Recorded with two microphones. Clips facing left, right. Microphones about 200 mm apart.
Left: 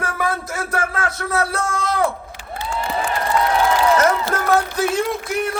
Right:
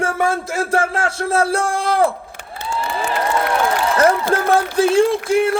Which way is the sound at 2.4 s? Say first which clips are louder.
Left 1 dB; 55° right (ahead or behind).